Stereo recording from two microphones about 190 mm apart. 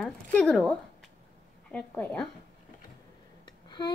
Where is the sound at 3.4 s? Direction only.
20° left (ahead or behind).